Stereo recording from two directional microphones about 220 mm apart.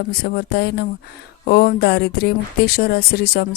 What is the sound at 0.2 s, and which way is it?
Speech, 45° left (ahead or behind).